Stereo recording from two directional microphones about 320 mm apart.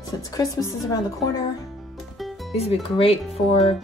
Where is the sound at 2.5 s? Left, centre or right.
Centre.